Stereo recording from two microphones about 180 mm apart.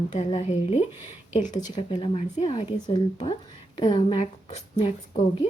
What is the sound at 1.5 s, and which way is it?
Speech, 20° left (ahead or behind).